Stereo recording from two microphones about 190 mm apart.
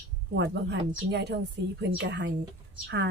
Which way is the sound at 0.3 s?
65° right (ahead or behind).